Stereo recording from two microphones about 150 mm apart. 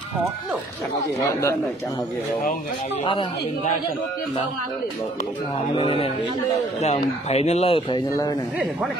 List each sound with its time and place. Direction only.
1.2 s a man's voice: 20° left (ahead or behind)
5.8 s a man's voice: 40° left (ahead or behind)